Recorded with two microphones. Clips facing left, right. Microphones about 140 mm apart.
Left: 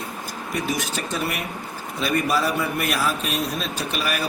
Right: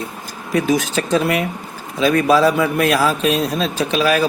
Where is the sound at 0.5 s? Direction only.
90° right.